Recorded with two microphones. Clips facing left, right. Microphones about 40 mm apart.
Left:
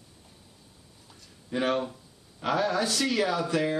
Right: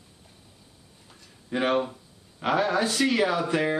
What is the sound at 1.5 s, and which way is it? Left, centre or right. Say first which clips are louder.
Speech: right 3 dB; right.